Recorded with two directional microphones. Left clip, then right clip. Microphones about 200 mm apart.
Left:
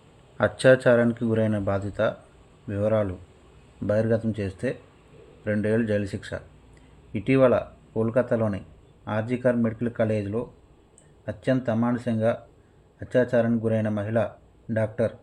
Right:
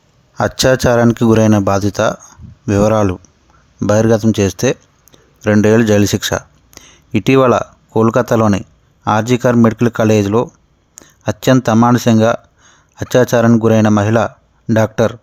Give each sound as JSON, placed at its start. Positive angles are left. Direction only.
{"t": 0.3, "sound": "speech", "side_deg": -40}